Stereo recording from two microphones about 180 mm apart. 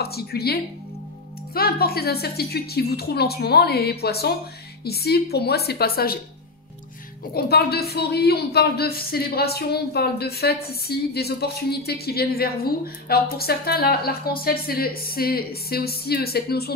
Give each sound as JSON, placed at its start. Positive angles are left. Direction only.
{"t": 0.0, "sound": "speech", "side_deg": 60}
{"t": 7.3, "sound": "speech", "side_deg": 60}